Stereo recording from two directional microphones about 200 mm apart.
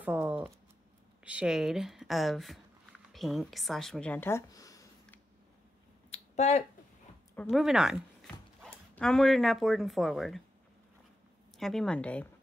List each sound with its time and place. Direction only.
0.0 s shuffling cards: 10° right (ahead or behind)
1.2 s speech: 5° right (ahead or behind); by 5.2 s 15° left (ahead or behind)
6.0 s a sound: 30° left (ahead or behind)
7.3 s speech: centre (ahead or behind)
11.5 s speech: centre (ahead or behind)